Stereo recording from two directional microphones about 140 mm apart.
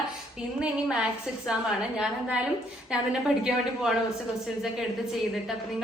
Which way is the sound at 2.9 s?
5° right (ahead or behind).